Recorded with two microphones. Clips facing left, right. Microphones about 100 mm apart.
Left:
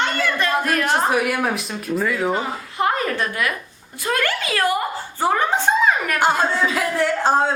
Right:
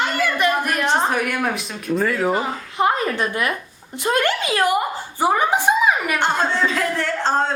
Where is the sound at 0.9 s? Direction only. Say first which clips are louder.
Even; 5° left (ahead or behind).